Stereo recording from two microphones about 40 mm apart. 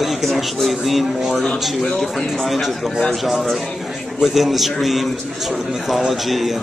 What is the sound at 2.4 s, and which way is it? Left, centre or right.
Speech, centre.